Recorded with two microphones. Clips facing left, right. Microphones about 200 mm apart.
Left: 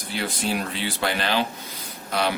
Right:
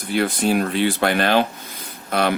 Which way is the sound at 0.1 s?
55° right (ahead or behind).